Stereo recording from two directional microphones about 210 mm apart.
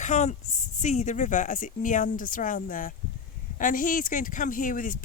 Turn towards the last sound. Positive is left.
turn(degrees=40)  # may be behind; listen again after turning